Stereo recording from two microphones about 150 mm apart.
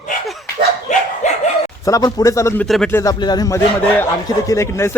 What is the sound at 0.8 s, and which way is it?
Dog, 50° left (ahead or behind).